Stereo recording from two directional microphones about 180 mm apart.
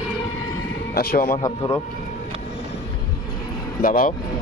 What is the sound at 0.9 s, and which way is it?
Speech, 60° left (ahead or behind).